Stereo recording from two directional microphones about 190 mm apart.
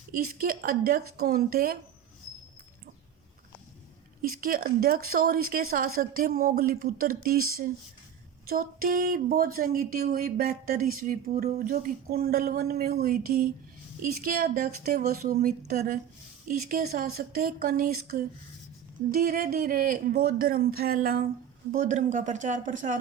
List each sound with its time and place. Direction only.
0.1 s speech: 50° right (ahead or behind)
4.2 s speech: 45° right (ahead or behind)
8.4 s speech: 50° right (ahead or behind)
11.4 s speech: 35° right (ahead or behind)
11.7 s speech: 55° right (ahead or behind)